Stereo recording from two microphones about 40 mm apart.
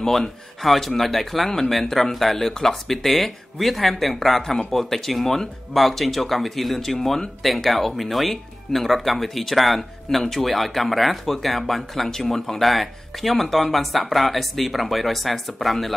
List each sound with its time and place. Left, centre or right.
0.0 s speech: centre
0.6 s speech: centre